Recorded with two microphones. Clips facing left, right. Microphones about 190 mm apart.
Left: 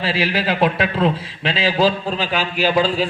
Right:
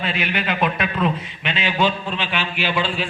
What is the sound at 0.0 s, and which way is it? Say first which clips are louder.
A man's voice: left 4 dB; 30° left (ahead or behind).